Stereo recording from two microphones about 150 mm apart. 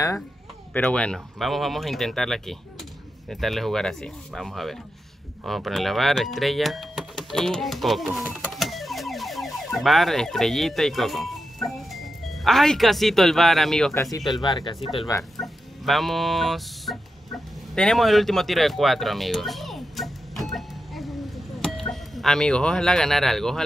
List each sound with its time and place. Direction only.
0.7 s speech: 5° left (ahead or behind)
14.3 s speech: 30° left (ahead or behind)
15.3 s chicken: centre (ahead or behind)
17.7 s a sound: 5° left (ahead or behind)